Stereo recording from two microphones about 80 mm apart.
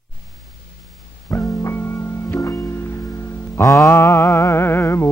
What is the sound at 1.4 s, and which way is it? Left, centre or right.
Music, left.